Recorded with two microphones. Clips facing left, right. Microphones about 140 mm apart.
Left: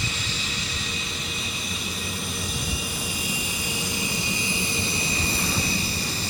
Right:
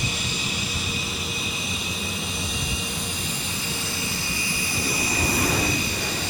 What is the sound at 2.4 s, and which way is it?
Vehicle, centre (ahead or behind).